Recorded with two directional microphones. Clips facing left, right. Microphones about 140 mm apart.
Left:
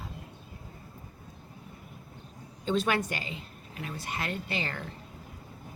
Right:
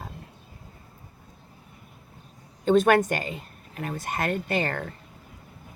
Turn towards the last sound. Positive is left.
turn(degrees=-50)  # may be behind; listen again after turning